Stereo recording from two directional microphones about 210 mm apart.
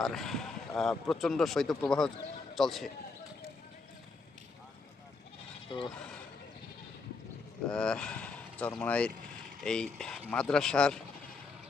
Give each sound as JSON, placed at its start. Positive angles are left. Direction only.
{"t": 0.0, "sound": "speech", "side_deg": 0}
{"t": 5.7, "sound": "speech", "side_deg": 25}
{"t": 7.7, "sound": "speech", "side_deg": 5}